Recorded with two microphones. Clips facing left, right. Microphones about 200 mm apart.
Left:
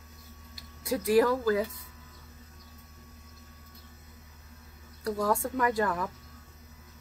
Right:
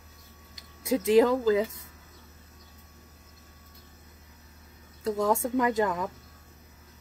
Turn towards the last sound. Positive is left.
turn(degrees=-20)  # may be behind; listen again after turning